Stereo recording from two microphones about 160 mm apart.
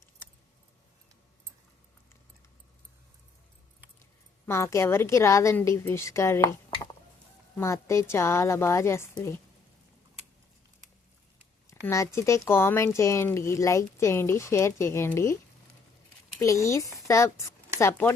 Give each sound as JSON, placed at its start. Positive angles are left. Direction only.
{"t": 4.4, "sound": "speech", "side_deg": 15}
{"t": 7.5, "sound": "speech", "side_deg": 15}
{"t": 11.7, "sound": "speech", "side_deg": 15}
{"t": 16.4, "sound": "speech", "side_deg": 20}